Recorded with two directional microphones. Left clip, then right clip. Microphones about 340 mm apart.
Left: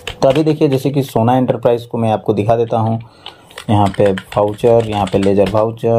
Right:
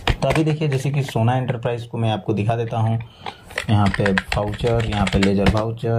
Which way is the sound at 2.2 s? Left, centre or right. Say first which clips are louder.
Left 9 dB; left.